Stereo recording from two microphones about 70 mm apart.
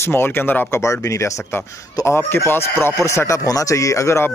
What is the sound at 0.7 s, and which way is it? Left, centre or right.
Speech, left.